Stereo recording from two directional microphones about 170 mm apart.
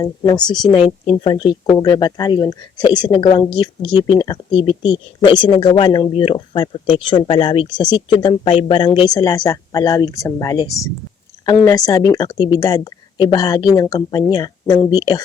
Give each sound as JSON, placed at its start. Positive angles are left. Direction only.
{"t": 0.7, "sound": "speech", "side_deg": 30}